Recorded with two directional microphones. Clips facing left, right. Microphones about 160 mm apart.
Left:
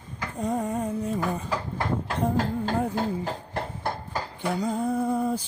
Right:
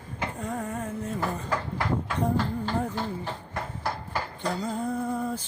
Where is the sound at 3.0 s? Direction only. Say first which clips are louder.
Left 4 dB; 40° left (ahead or behind).